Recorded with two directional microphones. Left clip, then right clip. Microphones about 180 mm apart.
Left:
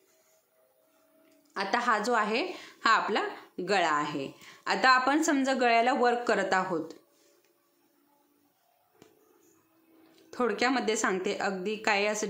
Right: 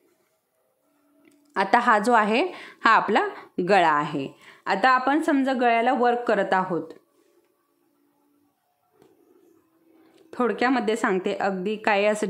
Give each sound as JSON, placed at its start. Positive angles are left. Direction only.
{"t": 1.5, "sound": "a woman's voice", "side_deg": -50}
{"t": 10.1, "sound": "a woman's voice", "side_deg": -35}